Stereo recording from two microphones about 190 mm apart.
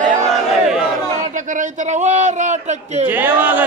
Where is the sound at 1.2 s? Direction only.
40° right (ahead or behind).